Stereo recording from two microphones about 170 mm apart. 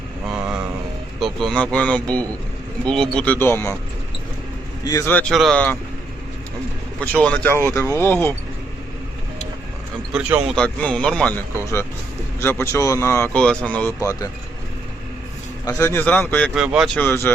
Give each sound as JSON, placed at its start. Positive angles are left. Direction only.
{"t": 1.2, "sound": "speech", "side_deg": 5}
{"t": 4.8, "sound": "speech", "side_deg": 20}
{"t": 5.3, "sound": "speech", "side_deg": 0}
{"t": 7.0, "sound": "speech", "side_deg": 10}
{"t": 10.1, "sound": "speech", "side_deg": -10}
{"t": 10.5, "sound": "speech", "side_deg": 5}
{"t": 14.0, "sound": "speech", "side_deg": 20}
{"t": 15.6, "sound": "speech", "side_deg": 15}
{"t": 16.6, "sound": "speech", "side_deg": -5}
{"t": 17.0, "sound": "speech", "side_deg": 10}